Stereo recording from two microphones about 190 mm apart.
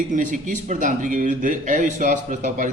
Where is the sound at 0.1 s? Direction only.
45° right (ahead or behind).